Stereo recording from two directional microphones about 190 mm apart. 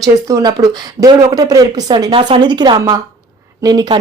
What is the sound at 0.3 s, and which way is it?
Speech, 20° right (ahead or behind).